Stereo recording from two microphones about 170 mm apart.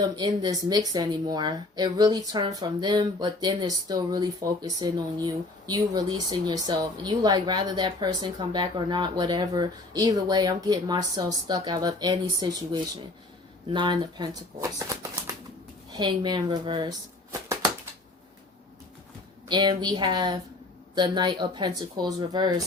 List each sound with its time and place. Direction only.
0.0 s speech: 25° right (ahead or behind)
19.5 s speech: 25° right (ahead or behind)